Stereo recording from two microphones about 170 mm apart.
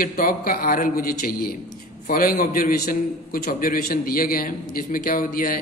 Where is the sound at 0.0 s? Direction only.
60° left (ahead or behind).